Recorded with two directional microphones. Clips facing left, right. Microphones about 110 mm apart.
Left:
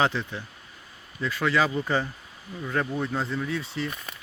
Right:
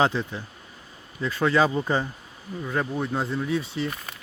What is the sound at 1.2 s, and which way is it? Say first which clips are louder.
A man's voice: right 3 dB; 20° right (ahead or behind).